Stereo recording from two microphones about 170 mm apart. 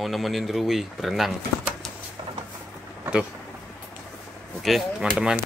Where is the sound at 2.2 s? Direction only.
25° right (ahead or behind).